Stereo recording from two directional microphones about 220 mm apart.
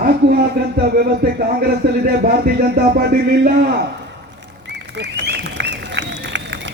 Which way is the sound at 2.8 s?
45° right (ahead or behind).